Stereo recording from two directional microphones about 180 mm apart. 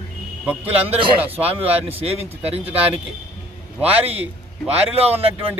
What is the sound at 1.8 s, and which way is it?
Speech, 35° right (ahead or behind).